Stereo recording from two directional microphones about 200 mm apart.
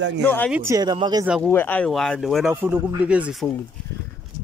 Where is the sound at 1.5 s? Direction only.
10° left (ahead or behind).